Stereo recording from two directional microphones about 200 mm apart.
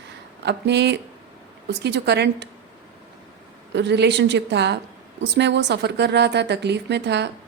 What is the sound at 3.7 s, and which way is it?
A woman's voice, 60° right (ahead or behind).